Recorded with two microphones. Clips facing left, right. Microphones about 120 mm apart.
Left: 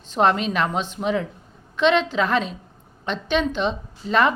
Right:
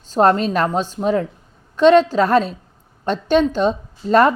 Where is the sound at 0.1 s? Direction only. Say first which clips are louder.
Right 5 dB; 40° right (ahead or behind).